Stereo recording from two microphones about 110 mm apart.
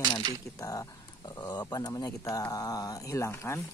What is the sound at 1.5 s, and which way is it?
Speech, 35° left (ahead or behind).